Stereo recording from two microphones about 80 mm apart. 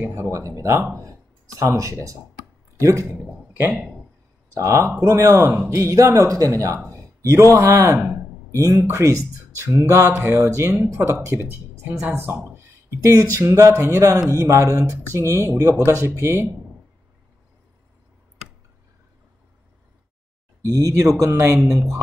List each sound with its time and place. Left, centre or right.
0.1 s speech: right
3.5 s a man's voice: centre
4.6 s speech: right
8.1 s a sound: right
8.8 s speech: right
12.5 s a sound: right
13.4 s speech: right
20.7 s speech: right